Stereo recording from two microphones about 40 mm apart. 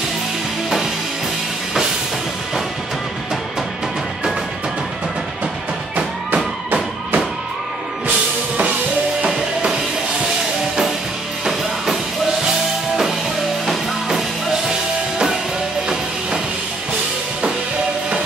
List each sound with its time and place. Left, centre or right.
5.9 s music: right
11.4 s music: centre
13.7 s music: centre